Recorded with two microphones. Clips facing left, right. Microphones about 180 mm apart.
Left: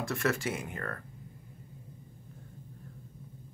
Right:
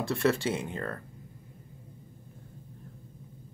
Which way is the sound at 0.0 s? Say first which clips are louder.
Right 4 dB; 30° right (ahead or behind).